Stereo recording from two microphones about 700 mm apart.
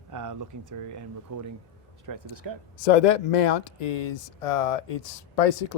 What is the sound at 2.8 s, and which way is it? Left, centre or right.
Speech, left.